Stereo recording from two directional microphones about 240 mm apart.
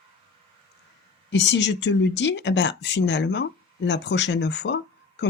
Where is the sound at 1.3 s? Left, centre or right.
Left.